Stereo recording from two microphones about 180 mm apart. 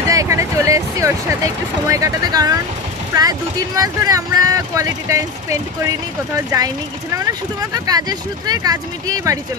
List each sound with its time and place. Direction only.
0.1 s speech: 15° right (ahead or behind)
7.7 s speech: 20° right (ahead or behind)